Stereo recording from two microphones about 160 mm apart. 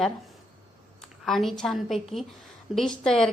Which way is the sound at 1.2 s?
Centre (ahead or behind).